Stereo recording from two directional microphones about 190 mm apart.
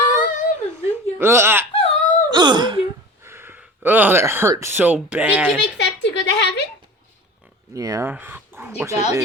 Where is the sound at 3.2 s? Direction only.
10° right (ahead or behind).